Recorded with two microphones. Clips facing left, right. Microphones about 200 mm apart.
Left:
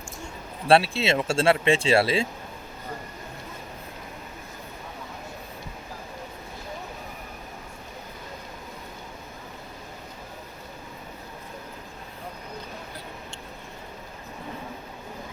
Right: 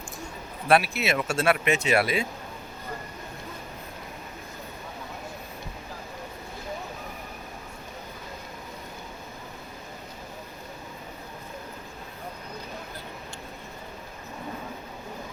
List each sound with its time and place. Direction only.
0.7 s speech: 30° left (ahead or behind)